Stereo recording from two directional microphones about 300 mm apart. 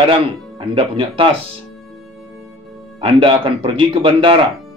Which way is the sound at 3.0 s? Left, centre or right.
Centre.